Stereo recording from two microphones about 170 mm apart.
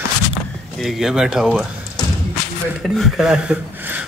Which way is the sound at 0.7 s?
Centre (ahead or behind).